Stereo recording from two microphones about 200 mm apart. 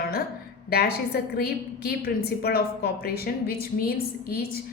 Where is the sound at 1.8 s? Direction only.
50° left (ahead or behind).